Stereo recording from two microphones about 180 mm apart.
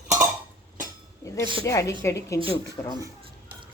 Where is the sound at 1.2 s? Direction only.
20° left (ahead or behind).